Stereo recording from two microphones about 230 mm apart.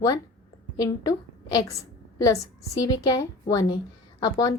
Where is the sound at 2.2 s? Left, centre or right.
Centre.